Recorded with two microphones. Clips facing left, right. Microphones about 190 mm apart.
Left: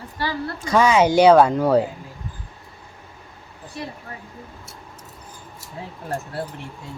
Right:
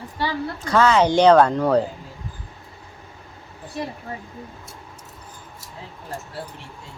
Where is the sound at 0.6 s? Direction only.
15° left (ahead or behind).